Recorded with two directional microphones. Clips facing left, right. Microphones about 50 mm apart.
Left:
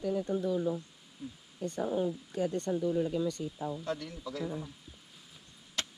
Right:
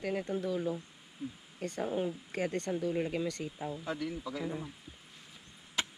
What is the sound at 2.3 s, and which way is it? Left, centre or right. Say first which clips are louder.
Speech: left 2 dB; right.